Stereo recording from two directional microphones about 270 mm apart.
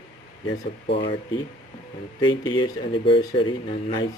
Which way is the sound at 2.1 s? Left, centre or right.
Centre.